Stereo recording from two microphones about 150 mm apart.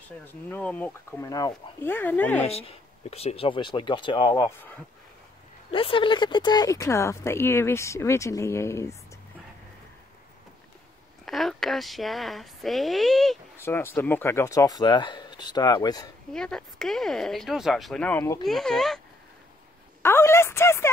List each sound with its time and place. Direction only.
0.3 s speech: 10° left (ahead or behind)
2.4 s speech: 40° left (ahead or behind)
4.5 s speech: 15° left (ahead or behind)
5.7 s speech: 35° left (ahead or behind); by 8.9 s 20° left (ahead or behind)
11.2 s speech: centre (ahead or behind)
13.6 s speech: 15° left (ahead or behind)
16.3 s speech: 5° left (ahead or behind)
18.4 s speech: centre (ahead or behind)
20.0 s speech: 15° left (ahead or behind)